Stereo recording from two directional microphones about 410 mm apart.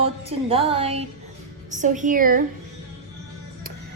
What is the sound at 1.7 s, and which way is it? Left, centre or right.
Speech, centre.